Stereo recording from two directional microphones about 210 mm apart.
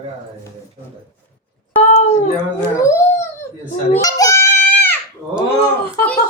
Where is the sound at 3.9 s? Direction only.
15° left (ahead or behind).